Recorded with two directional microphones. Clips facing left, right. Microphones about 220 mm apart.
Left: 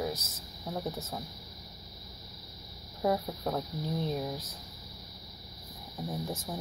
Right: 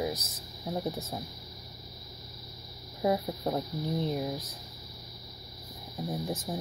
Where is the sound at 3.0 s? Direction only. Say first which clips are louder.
Right 2 dB; 15° right (ahead or behind).